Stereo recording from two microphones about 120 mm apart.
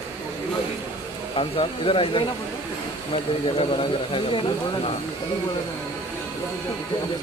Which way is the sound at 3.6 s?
50° left (ahead or behind).